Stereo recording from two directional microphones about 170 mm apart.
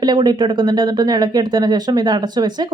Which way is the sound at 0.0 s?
25° right (ahead or behind).